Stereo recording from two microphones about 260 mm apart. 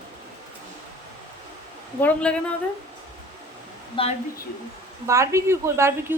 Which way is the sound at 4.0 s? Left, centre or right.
Centre.